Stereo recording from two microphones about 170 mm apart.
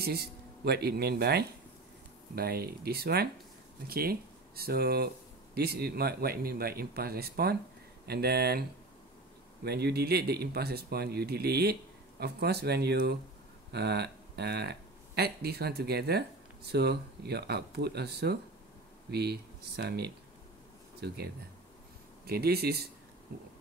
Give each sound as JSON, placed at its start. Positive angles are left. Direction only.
{"t": 0.0, "sound": "speech", "side_deg": -70}
{"t": 9.7, "sound": "speech", "side_deg": -70}
{"t": 22.2, "sound": "speech", "side_deg": -65}